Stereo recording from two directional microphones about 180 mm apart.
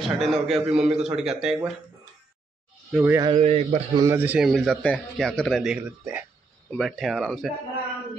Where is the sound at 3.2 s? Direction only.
30° right (ahead or behind).